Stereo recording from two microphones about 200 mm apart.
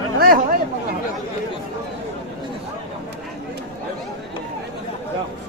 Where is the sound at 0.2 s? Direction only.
45° right (ahead or behind).